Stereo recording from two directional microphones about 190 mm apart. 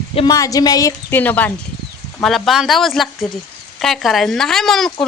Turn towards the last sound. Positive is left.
turn(degrees=0)  # may be behind; listen again after turning